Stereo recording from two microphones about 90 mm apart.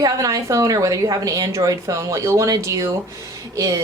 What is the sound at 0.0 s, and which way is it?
A woman's voice, 40° right (ahead or behind).